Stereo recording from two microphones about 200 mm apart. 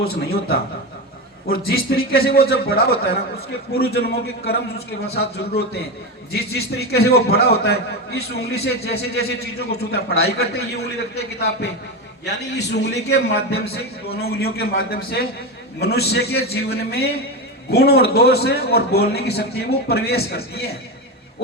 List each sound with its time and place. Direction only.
0.0 s a man's voice: 50° left (ahead or behind)